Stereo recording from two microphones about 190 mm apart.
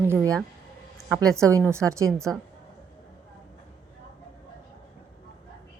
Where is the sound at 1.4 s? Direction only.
15° right (ahead or behind).